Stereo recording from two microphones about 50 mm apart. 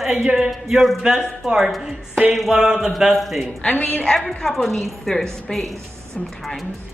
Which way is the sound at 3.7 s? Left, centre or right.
Left.